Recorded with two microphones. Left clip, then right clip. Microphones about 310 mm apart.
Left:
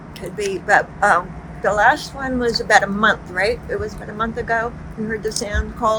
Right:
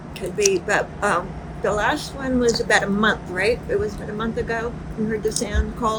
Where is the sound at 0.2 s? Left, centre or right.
Centre.